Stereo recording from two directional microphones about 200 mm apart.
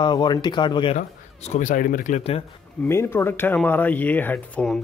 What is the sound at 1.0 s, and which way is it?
Speech, 35° left (ahead or behind).